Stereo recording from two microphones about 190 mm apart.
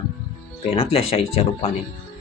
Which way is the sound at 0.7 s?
30° left (ahead or behind).